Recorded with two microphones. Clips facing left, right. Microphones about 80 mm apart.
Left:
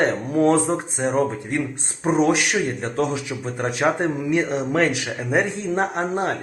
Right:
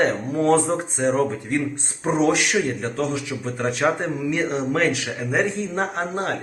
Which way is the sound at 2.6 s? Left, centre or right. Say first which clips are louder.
Right 1 dB; centre.